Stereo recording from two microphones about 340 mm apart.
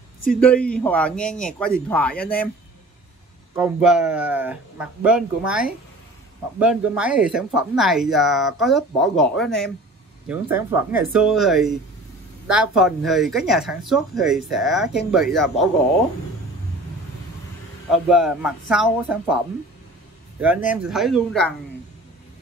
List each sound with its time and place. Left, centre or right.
0.4 s speech: centre
3.5 s speech: centre
18.0 s speech: centre